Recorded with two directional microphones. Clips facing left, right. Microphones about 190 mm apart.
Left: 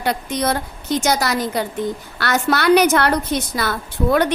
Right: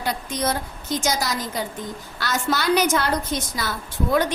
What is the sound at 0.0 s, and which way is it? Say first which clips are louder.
A woman's voice: left 4 dB; 65° left (ahead or behind).